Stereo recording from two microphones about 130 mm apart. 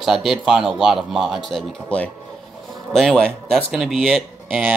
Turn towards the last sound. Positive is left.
turn(degrees=0)  # may be behind; listen again after turning